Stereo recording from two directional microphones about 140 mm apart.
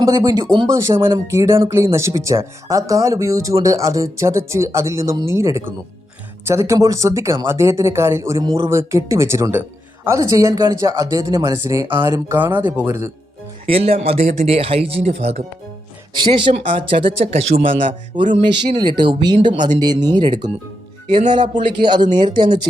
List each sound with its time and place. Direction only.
0.0 s speech: 25° right (ahead or behind)
10.2 s speech: 25° right (ahead or behind)
13.7 s speech: 45° right (ahead or behind)
16.1 s speech: 35° right (ahead or behind)
18.1 s speech: 35° right (ahead or behind)
21.6 s speech: 35° right (ahead or behind)